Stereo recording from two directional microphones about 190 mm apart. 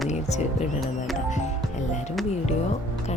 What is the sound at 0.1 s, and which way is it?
Speech, 40° left (ahead or behind).